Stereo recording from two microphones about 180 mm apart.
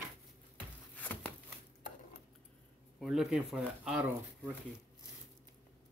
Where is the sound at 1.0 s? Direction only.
10° left (ahead or behind).